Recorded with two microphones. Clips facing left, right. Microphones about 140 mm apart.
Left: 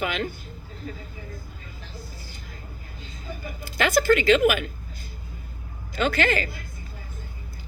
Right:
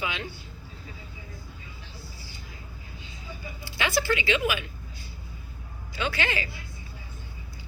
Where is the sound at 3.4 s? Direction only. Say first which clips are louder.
Left 5 dB; 50° left (ahead or behind).